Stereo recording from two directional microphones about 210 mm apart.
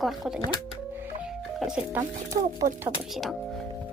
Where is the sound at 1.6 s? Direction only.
5° right (ahead or behind).